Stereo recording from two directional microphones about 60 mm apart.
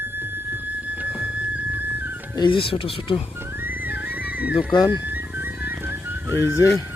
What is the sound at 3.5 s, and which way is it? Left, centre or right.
Music, right.